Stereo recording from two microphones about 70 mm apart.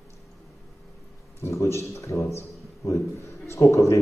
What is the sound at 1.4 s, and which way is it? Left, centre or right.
Speech, left.